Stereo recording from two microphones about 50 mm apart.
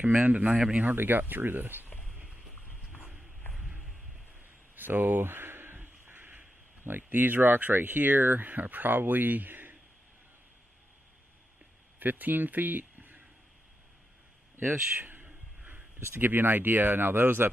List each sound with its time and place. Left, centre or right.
0.0 s speech: right
0.9 s speech: right
4.7 s speech: right
12.0 s speech: right
14.9 s whispering: right
16.1 s speech: right